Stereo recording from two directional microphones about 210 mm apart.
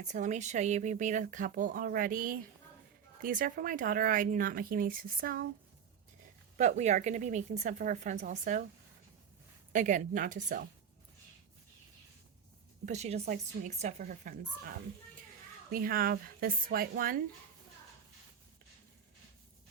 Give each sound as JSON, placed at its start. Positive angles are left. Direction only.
{"t": 0.0, "sound": "speech", "side_deg": -35}
{"t": 6.6, "sound": "speech", "side_deg": -35}
{"t": 9.7, "sound": "speech", "side_deg": -40}
{"t": 12.8, "sound": "speech", "side_deg": -30}
{"t": 15.7, "sound": "speech", "side_deg": -45}